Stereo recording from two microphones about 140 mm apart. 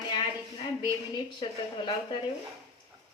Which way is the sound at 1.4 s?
35° left (ahead or behind).